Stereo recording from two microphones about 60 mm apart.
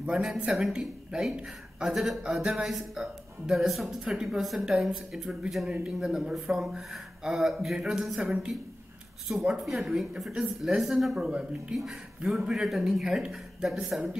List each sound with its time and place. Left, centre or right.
0.1 s speech: centre
11.1 s speech: centre
11.7 s speech: centre
13.0 s speech: centre